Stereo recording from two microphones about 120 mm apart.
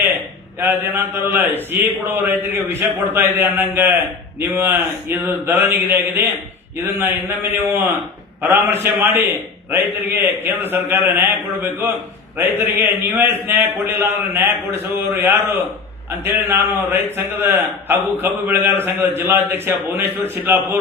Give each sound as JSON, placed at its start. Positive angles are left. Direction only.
{"t": 0.6, "sound": "a man's voice", "side_deg": -15}
{"t": 16.2, "sound": "a man's voice", "side_deg": -20}